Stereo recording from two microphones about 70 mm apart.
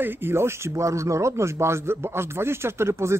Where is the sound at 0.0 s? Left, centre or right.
Right.